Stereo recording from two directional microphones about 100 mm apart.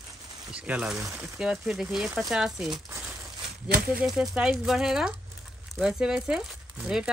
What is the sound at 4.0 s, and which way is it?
Speech, 10° right (ahead or behind).